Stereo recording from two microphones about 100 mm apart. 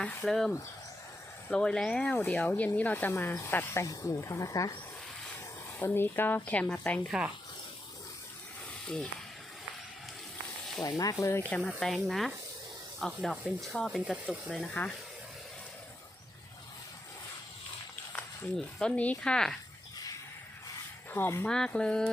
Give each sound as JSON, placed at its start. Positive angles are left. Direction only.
{"t": 0.0, "sound": "speech", "side_deg": 15}
{"t": 0.3, "sound": "speech", "side_deg": 0}
{"t": 5.8, "sound": "speech", "side_deg": 20}
{"t": 7.1, "sound": "speech", "side_deg": -5}
{"t": 10.8, "sound": "speech", "side_deg": 35}
{"t": 11.4, "sound": "speech", "side_deg": 10}
{"t": 18.5, "sound": "speech", "side_deg": 10}
{"t": 21.1, "sound": "speech", "side_deg": 25}
{"t": 21.4, "sound": "speech", "side_deg": 10}